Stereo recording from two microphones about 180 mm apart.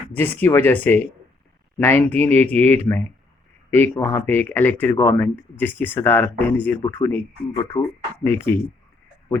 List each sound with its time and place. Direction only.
0.3 s speech: 10° left (ahead or behind)
8.2 s speech: 10° left (ahead or behind)